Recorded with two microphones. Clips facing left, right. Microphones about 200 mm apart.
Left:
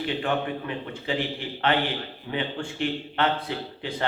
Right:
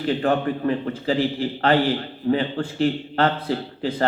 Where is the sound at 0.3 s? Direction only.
40° right (ahead or behind).